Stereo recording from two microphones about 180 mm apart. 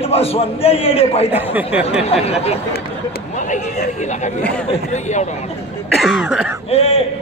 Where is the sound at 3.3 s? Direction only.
45° left (ahead or behind).